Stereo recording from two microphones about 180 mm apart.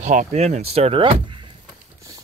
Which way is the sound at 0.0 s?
40° right (ahead or behind).